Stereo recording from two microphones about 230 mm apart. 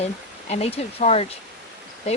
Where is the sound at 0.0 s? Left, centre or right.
Left.